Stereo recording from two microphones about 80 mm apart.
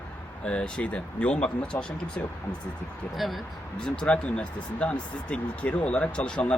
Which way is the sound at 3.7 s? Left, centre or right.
Centre.